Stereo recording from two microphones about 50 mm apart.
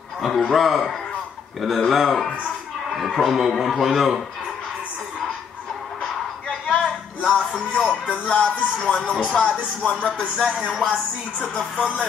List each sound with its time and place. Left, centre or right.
0.2 s a man's voice: centre
6.7 s a sound: left
7.3 s music: centre
7.9 s speech: left
10.4 s speech: centre
11.4 s speech: centre